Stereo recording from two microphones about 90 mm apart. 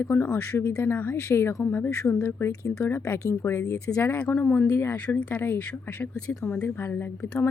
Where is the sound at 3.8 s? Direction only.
15° left (ahead or behind).